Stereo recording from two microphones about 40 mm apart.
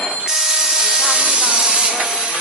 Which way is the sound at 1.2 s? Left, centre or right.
Right.